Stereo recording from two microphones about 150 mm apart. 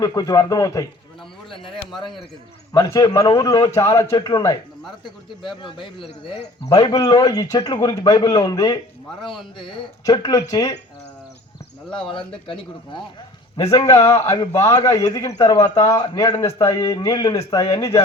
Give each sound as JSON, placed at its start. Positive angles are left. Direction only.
{"t": 0.0, "sound": "a man's voice", "side_deg": 25}
{"t": 2.7, "sound": "a man's voice", "side_deg": 20}
{"t": 5.6, "sound": "a man's voice", "side_deg": 35}
{"t": 10.0, "sound": "a man's voice", "side_deg": 25}
{"t": 12.0, "sound": "speech", "side_deg": 35}
{"t": 13.6, "sound": "a man's voice", "side_deg": 20}